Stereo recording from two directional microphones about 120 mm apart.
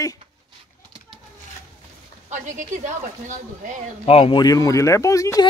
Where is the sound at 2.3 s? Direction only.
85° right.